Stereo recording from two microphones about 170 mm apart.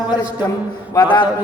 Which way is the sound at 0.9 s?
25° left (ahead or behind).